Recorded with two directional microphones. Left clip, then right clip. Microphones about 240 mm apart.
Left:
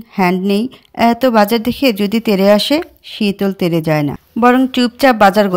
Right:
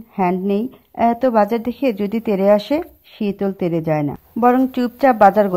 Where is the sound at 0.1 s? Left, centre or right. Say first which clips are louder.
Left 4 dB; left.